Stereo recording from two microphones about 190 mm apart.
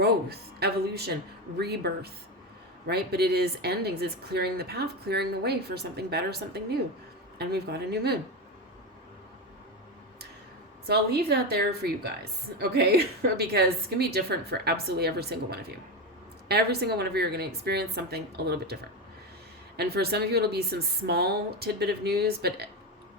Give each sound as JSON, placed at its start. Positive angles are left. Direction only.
{"t": 0.0, "sound": "speech", "side_deg": -55}
{"t": 10.8, "sound": "speech", "side_deg": -60}